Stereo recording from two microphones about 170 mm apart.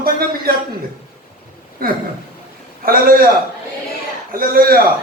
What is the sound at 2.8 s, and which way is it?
Speech, 60° right (ahead or behind).